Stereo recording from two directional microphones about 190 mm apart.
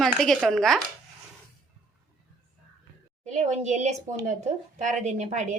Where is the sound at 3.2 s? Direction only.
35° right (ahead or behind).